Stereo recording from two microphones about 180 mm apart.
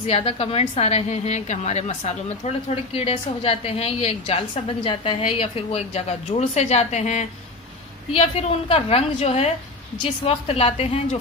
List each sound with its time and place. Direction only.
0.0 s a woman's voice: 30° left (ahead or behind)